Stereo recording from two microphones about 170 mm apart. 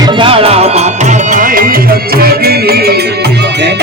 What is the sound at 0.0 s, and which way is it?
Music, 30° right (ahead or behind).